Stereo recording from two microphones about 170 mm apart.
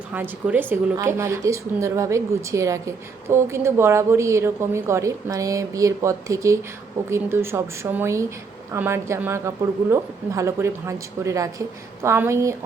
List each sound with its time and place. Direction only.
0.1 s speech: 10° right (ahead or behind)